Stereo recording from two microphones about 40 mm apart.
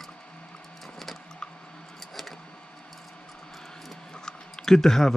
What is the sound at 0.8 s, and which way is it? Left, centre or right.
Printer, centre.